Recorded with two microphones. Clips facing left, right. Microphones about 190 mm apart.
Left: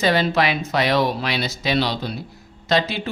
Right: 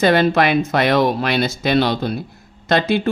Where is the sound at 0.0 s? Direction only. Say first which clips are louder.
Right 5 dB; 55° right (ahead or behind).